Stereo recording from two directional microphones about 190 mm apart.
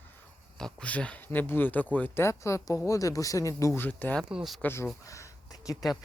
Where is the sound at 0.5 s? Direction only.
5° left (ahead or behind).